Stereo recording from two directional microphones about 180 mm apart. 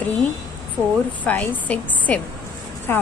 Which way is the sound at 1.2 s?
10° left (ahead or behind).